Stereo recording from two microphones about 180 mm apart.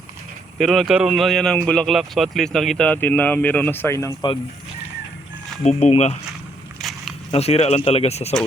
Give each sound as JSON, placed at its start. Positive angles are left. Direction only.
{"t": 0.6, "sound": "speech", "side_deg": 0}
{"t": 5.6, "sound": "speech", "side_deg": 35}
{"t": 6.8, "sound": "a sound", "side_deg": 0}
{"t": 7.3, "sound": "speech", "side_deg": 35}